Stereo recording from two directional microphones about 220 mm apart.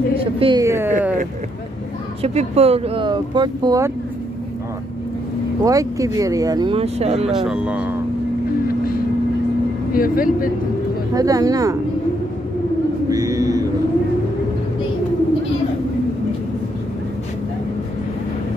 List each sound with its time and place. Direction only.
0.2 s a woman's voice: 25° right (ahead or behind)
2.2 s speech: 30° right (ahead or behind)
5.6 s speech: 15° right (ahead or behind)
7.2 s speech: 5° right (ahead or behind)
9.9 s speech: 40° left (ahead or behind)
11.1 s speech: 15° right (ahead or behind)
13.1 s a sound: 15° right (ahead or behind)